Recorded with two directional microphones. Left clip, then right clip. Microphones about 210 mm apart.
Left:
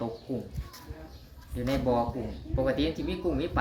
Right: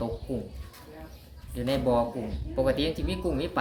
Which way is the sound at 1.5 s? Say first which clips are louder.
Right 2 dB; 15° right (ahead or behind).